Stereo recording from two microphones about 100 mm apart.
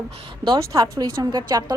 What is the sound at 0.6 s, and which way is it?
A woman's voice, 30° right (ahead or behind).